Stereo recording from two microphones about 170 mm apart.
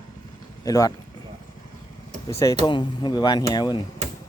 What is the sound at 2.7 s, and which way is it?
Speech, 25° left (ahead or behind).